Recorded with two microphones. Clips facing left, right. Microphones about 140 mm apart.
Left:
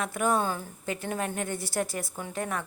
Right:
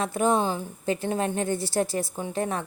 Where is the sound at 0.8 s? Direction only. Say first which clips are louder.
Right 6 dB; 30° right (ahead or behind).